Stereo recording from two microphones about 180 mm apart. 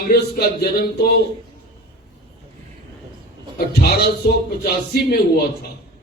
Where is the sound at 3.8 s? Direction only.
60° left (ahead or behind).